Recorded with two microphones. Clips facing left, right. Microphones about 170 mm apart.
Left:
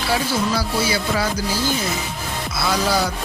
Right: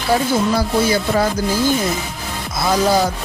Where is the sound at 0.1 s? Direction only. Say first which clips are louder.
Right 5 dB; 50° right (ahead or behind).